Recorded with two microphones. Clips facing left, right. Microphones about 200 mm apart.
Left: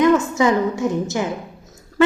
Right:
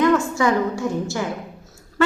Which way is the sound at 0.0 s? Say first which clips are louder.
Left 2 dB; 20° left (ahead or behind).